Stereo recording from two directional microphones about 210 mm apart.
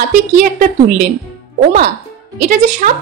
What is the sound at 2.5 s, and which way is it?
Speech, 35° right (ahead or behind).